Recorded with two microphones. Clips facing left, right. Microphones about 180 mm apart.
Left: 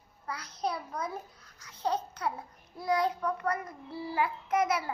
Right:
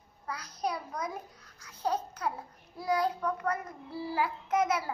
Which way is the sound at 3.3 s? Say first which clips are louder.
Even; 10° left (ahead or behind).